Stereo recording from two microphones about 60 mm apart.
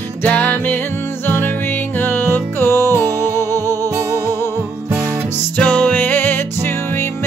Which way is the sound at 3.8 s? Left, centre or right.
Right.